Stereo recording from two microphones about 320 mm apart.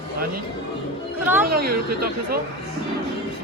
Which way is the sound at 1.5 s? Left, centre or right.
Right.